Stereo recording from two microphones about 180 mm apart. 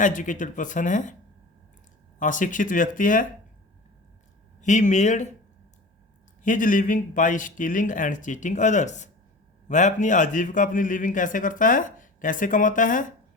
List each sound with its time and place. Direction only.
0.0 s a man's voice: 45° left (ahead or behind)
2.1 s a man's voice: 45° left (ahead or behind)
4.6 s speech: 40° left (ahead or behind)
6.4 s a man's voice: 45° left (ahead or behind)